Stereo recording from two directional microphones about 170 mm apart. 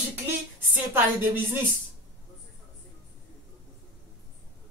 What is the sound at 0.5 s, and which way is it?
A woman's voice, 15° right (ahead or behind).